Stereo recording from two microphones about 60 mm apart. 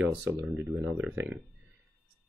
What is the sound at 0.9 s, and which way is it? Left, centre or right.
Speech, right.